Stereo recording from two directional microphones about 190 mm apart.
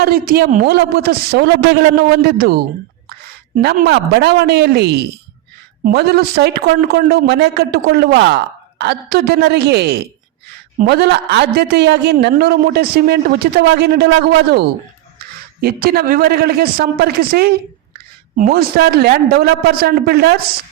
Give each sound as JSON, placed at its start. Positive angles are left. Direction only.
{"t": 0.0, "sound": "a man's voice", "side_deg": -50}
{"t": 3.6, "sound": "a man's voice", "side_deg": -55}